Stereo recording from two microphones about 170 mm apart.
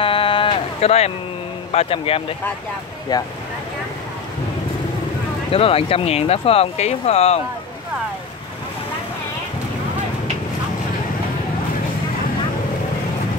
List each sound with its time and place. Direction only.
0.0 s a sound: 30° left (ahead or behind)
1.7 s speech: 35° left (ahead or behind)
3.1 s speech: 25° left (ahead or behind)
5.5 s speech: 35° left (ahead or behind)